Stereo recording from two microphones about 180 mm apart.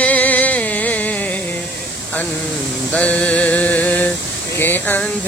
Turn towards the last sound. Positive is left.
turn(degrees=10)  # may be behind; listen again after turning